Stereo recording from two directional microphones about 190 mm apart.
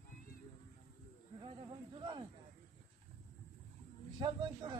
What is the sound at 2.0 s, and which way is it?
Speech, 30° right (ahead or behind).